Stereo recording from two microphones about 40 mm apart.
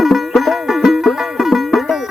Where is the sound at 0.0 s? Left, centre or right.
Centre.